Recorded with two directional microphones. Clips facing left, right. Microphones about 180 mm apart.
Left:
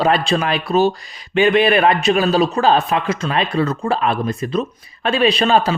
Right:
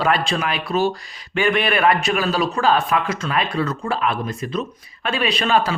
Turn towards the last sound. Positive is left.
turn(degrees=30)  # may be behind; listen again after turning